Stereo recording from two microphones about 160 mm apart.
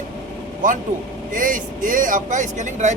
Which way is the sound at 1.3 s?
55° right (ahead or behind).